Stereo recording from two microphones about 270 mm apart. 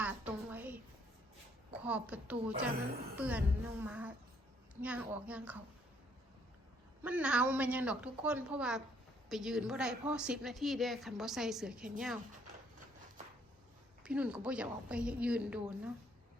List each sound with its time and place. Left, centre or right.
0.0 s a sound: centre
1.7 s a woman's voice: centre
7.0 s a woman's voice: centre
14.0 s a woman's voice: centre